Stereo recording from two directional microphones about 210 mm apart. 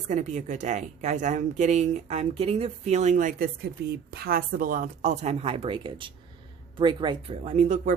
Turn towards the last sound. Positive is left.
turn(degrees=-35)  # may be behind; listen again after turning